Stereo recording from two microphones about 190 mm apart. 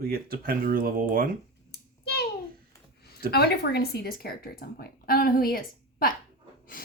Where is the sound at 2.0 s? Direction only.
55° left (ahead or behind).